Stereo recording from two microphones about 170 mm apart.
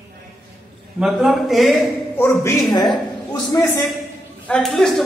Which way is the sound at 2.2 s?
15° left (ahead or behind).